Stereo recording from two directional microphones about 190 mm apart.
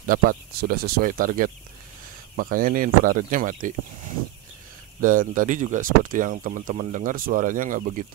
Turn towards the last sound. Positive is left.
turn(degrees=-45)  # may be behind; listen again after turning